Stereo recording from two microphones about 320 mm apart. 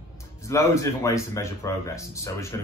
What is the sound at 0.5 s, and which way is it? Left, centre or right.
Speech, centre.